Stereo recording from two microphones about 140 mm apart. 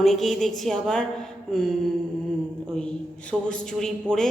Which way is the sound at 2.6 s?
5° left (ahead or behind).